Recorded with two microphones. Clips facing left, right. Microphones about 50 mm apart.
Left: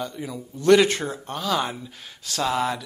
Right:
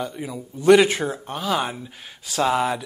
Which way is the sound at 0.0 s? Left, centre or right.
Centre.